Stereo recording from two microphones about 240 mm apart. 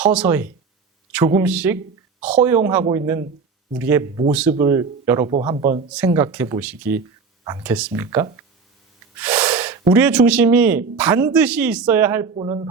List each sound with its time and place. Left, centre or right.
0.0 s speech: centre
5.9 s speech: centre
12.3 s speech: right